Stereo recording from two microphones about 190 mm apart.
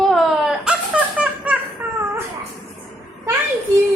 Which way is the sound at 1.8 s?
10° right (ahead or behind).